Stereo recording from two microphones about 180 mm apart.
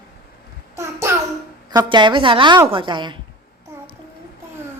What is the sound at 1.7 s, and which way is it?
A woman's voice, 25° right (ahead or behind).